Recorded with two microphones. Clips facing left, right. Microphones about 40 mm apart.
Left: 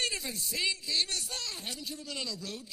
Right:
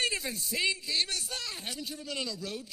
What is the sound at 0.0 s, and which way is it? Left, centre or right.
Speech, centre.